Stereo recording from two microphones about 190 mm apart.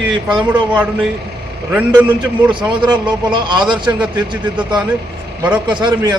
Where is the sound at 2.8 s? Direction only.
25° right (ahead or behind).